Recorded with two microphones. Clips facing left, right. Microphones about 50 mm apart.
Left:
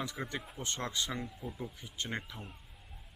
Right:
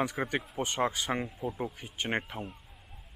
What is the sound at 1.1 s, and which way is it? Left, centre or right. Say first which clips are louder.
A man's voice: right 7 dB; right.